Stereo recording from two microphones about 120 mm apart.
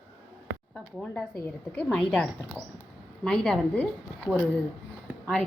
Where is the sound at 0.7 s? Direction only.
5° left (ahead or behind).